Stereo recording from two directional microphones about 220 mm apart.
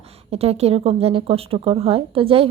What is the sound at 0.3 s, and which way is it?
Speech, 25° right (ahead or behind).